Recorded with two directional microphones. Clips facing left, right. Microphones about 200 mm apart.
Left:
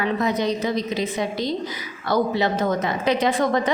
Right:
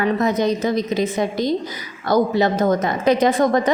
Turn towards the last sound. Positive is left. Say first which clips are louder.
# right 4 dB
turn(degrees=-45)  # may be behind; listen again after turning